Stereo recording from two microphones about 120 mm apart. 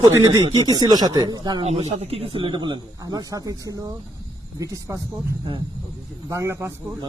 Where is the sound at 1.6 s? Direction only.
60° right (ahead or behind); by 6.9 s 25° right (ahead or behind).